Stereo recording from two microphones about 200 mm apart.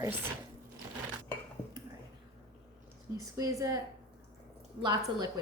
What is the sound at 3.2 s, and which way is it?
Speech, 15° right (ahead or behind).